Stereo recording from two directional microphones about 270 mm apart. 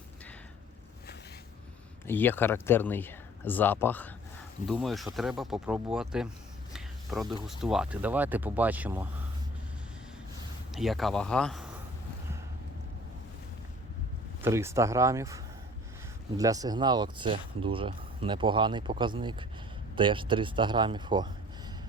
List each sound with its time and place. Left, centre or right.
2.0 s speech: centre
6.7 s a sound: centre
7.4 s speech: centre
10.7 s speech: centre
14.4 s speech: centre
16.4 s speech: centre